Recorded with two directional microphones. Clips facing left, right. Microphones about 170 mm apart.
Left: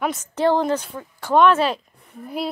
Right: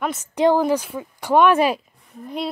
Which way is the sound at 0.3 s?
15° right (ahead or behind).